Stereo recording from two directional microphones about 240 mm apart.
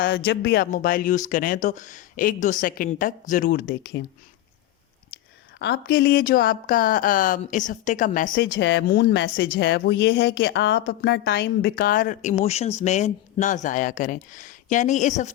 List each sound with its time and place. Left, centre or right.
0.0 s speech: left
5.5 s a woman's voice: left
11.7 s speech: left